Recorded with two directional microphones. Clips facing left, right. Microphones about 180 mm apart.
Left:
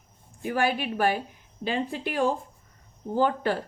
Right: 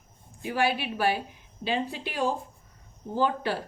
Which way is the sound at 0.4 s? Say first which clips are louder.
Left 1 dB; 45° left (ahead or behind).